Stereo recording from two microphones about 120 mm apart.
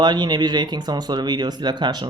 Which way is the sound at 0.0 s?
35° right (ahead or behind).